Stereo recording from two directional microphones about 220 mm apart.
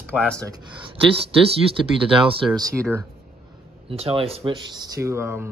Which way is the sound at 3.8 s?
25° right (ahead or behind).